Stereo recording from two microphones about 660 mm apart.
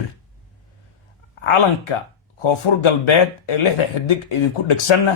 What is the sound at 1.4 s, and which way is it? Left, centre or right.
A man's voice, left.